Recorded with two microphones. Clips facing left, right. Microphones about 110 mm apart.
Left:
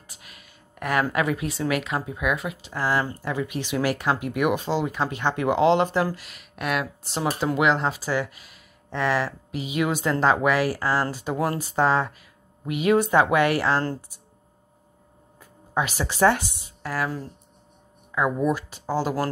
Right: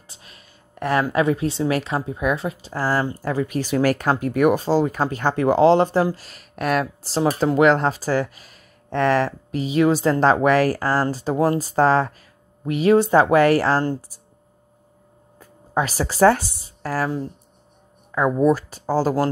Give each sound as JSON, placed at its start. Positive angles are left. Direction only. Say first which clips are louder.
{"t": 0.1, "sound": "a sound", "louder": "right 2 dB", "side_deg": -30}
{"t": 1.1, "sound": "speech", "louder": "right 5 dB", "side_deg": -30}
{"t": 15.7, "sound": "speech", "louder": "right 3 dB", "side_deg": -35}
{"t": 18.1, "sound": "speech", "louder": "right 5 dB", "side_deg": -35}